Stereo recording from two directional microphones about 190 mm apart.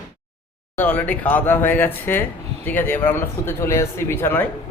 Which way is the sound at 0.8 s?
10° left (ahead or behind).